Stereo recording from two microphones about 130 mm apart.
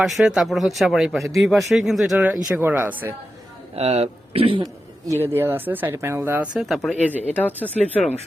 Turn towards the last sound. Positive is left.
turn(degrees=15)  # may be behind; listen again after turning